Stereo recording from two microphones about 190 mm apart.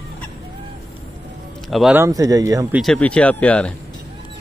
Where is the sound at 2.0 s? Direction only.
20° right (ahead or behind).